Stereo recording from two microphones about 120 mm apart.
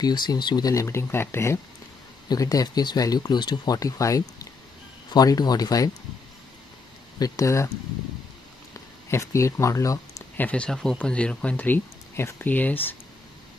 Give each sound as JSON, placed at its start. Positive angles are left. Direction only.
{"t": 0.0, "sound": "speech", "side_deg": 35}
{"t": 2.2, "sound": "speech", "side_deg": 30}
{"t": 7.2, "sound": "speech", "side_deg": 30}
{"t": 9.1, "sound": "speech", "side_deg": 25}
{"t": 10.3, "sound": "speech", "side_deg": 10}